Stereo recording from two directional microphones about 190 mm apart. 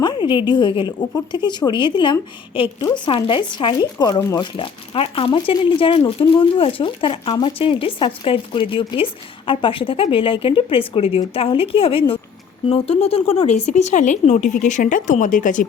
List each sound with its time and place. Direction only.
0.0 s speech: 25° left (ahead or behind); by 15.6 s 40° left (ahead or behind)